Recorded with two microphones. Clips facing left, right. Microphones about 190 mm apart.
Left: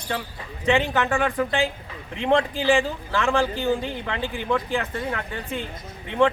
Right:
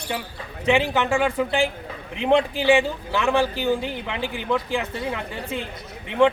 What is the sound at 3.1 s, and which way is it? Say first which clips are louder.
Speech: right 1 dB; 15° right (ahead or behind).